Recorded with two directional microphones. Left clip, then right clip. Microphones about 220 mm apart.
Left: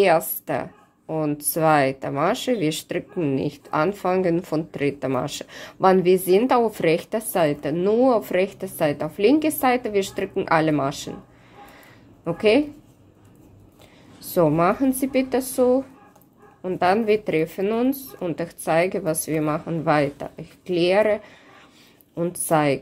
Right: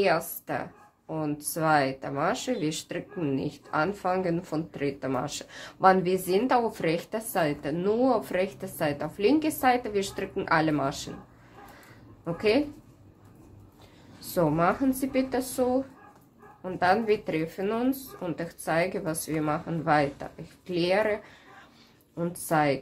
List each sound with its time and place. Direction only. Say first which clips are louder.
0.5 s speech: left 6 dB; 35° left (ahead or behind)
12.3 s speech: left 6 dB; 30° left (ahead or behind)
14.2 s speech: left 6 dB; 30° left (ahead or behind)